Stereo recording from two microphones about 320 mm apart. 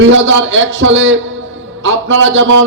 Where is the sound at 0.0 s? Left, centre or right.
Right.